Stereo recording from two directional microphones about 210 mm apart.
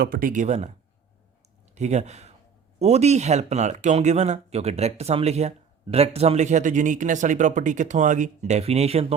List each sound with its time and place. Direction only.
0.0 s speech: 45° right (ahead or behind)
1.7 s speech: 35° right (ahead or behind)